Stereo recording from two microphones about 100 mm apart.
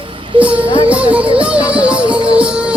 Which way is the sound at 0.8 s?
15° right (ahead or behind).